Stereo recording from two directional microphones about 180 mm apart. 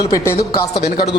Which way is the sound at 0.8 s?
65° left (ahead or behind).